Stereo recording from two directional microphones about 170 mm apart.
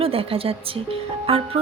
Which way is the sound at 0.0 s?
35° right (ahead or behind).